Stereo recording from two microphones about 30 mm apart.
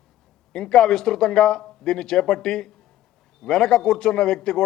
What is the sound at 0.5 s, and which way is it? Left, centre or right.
A man's voice, left.